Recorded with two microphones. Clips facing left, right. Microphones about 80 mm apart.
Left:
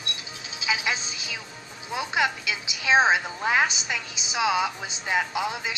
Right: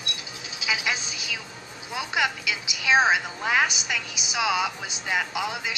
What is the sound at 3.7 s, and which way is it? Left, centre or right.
Speech, left.